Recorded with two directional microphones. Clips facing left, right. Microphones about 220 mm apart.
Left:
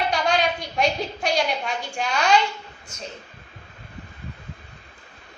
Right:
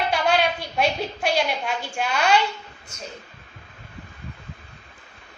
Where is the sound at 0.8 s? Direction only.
5° right (ahead or behind).